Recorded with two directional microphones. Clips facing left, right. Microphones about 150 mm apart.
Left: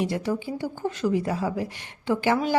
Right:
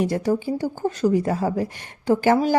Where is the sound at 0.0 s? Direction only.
45° right (ahead or behind).